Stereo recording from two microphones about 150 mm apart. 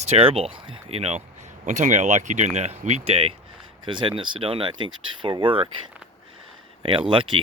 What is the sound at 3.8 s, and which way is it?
Speech, 30° right (ahead or behind).